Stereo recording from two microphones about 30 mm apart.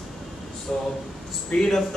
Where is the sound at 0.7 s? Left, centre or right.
Centre.